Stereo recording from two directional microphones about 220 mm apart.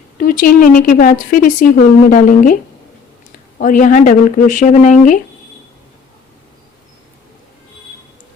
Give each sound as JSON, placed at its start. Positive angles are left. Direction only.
{"t": 0.2, "sound": "speech", "side_deg": 40}
{"t": 3.6, "sound": "speech", "side_deg": 35}